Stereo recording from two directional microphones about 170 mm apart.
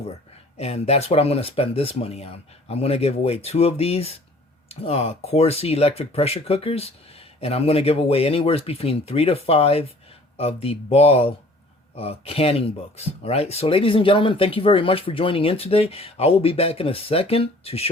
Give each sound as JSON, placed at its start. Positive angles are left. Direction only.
{"t": 0.5, "sound": "speech", "side_deg": 35}